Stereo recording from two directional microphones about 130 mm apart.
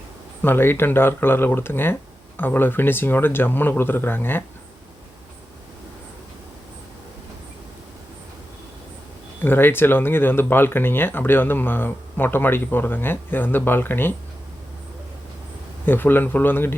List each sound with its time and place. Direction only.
0.4 s speech: 15° left (ahead or behind)
9.4 s speech: 15° left (ahead or behind)
15.9 s speech: 15° left (ahead or behind)